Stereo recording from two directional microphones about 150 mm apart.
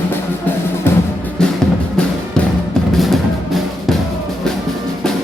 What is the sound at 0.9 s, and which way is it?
Music, 15° left (ahead or behind).